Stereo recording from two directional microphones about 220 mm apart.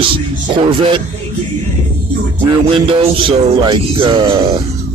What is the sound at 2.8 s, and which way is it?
Music, 25° right (ahead or behind).